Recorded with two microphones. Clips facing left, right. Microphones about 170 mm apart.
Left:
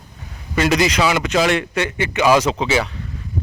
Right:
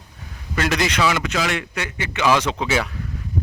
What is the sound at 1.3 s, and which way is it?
Speech, 30° left (ahead or behind).